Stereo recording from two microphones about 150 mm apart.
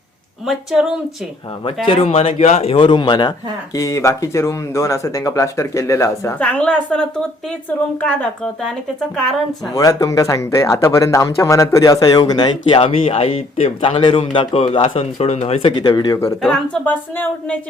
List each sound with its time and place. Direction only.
0.4 s speech: centre (ahead or behind)
1.9 s a man's voice: 40° left (ahead or behind); by 6.3 s 20° left (ahead or behind)
6.4 s a woman's voice: 10° left (ahead or behind)
9.7 s speech: 20° left (ahead or behind); by 15.7 s 40° left (ahead or behind)
15.7 s speech: 30° left (ahead or behind)
16.4 s a woman's voice: 10° left (ahead or behind)